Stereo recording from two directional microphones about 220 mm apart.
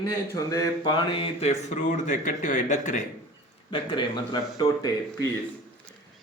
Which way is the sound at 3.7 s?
25° left (ahead or behind).